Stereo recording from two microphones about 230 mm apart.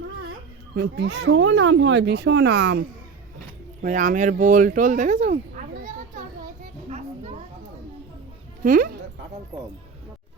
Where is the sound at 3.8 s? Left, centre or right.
Right.